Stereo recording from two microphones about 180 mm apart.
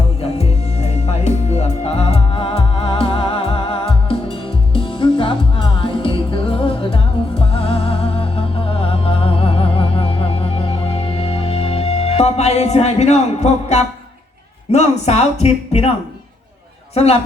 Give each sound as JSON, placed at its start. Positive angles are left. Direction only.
{"t": 0.2, "sound": "music", "side_deg": 35}
{"t": 14.7, "sound": "speech", "side_deg": 40}
{"t": 16.9, "sound": "a man's voice", "side_deg": 35}